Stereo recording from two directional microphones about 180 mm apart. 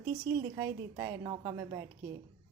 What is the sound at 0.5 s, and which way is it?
A woman's voice, 15° right (ahead or behind).